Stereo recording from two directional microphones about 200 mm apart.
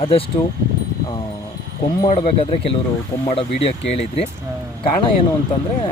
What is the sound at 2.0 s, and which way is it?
Speech, 30° left (ahead or behind).